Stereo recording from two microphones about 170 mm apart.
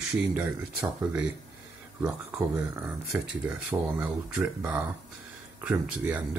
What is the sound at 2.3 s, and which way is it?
Speech, 5° right (ahead or behind).